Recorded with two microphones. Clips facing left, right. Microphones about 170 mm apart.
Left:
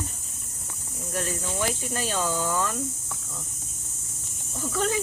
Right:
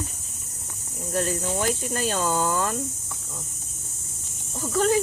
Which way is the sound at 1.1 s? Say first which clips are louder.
Right 5 dB; 45° right (ahead or behind).